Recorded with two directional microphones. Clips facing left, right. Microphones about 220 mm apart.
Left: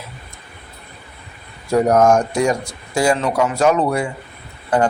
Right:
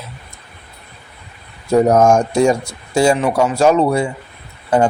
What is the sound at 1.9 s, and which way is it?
A man's voice, 25° right (ahead or behind).